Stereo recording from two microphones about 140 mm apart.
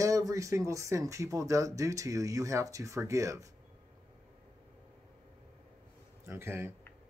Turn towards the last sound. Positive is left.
turn(degrees=-15)  # may be behind; listen again after turning